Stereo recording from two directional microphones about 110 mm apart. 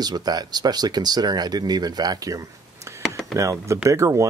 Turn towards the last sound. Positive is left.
turn(degrees=-30)  # may be behind; listen again after turning